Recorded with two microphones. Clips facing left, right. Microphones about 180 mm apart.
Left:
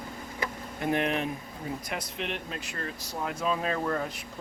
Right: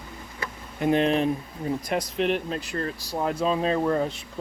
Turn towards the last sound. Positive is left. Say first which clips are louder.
# right 6 dB
turn(degrees=-25)  # may be behind; listen again after turning